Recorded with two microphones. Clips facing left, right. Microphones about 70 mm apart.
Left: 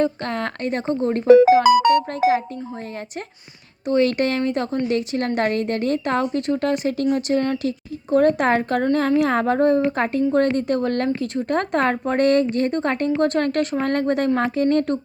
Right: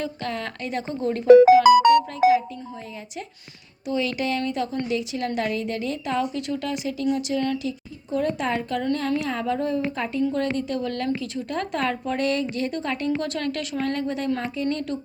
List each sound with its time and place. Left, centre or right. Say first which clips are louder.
0.0 s a woman's voice: left 7 dB; left
3.8 s a woman's voice: left 7 dB; left
7.7 s a woman's voice: left 8 dB; left
14.0 s speech: left 7 dB; left